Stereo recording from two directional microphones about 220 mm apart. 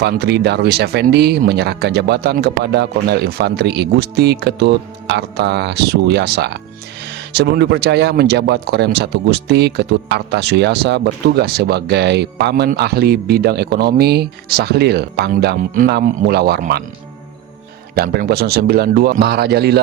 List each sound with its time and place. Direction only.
0.0 s speech: 50° right (ahead or behind)
17.9 s speech: 45° right (ahead or behind)